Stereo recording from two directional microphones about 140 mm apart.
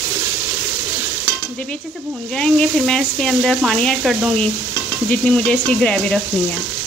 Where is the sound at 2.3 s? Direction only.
5° left (ahead or behind).